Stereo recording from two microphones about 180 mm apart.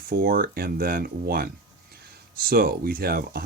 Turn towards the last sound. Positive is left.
turn(degrees=-55)  # may be behind; listen again after turning